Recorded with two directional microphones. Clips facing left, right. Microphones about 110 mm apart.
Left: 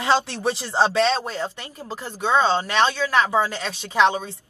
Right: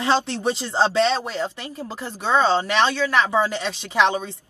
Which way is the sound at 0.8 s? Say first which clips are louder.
Right 1 dB; 20° left (ahead or behind).